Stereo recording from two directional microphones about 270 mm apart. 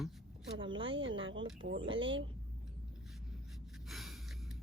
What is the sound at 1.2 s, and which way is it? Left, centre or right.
Speech, right.